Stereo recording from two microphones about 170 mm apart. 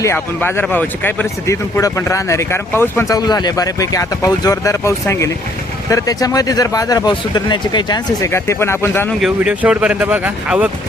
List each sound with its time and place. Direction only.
0.0 s speech: 15° left (ahead or behind)
9.2 s speech: 5° right (ahead or behind)